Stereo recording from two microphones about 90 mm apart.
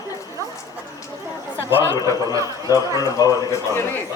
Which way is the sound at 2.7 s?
40° left (ahead or behind).